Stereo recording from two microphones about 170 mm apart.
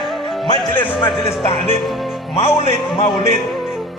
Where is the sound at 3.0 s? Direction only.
30° left (ahead or behind).